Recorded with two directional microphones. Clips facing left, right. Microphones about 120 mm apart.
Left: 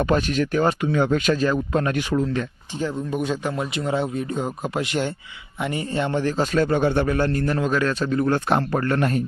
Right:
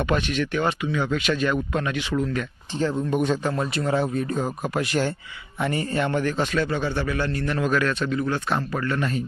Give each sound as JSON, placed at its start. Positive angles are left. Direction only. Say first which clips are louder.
{"t": 0.0, "sound": "a man's voice", "louder": "left 3 dB", "side_deg": 40}
{"t": 2.1, "sound": "speech", "louder": "left 1 dB", "side_deg": 30}
{"t": 3.1, "sound": "a man's voice", "louder": "right 3 dB", "side_deg": 0}
{"t": 3.4, "sound": "speech", "louder": "right 1 dB", "side_deg": 15}
{"t": 6.0, "sound": "a man's voice", "louder": "left 2 dB", "side_deg": 25}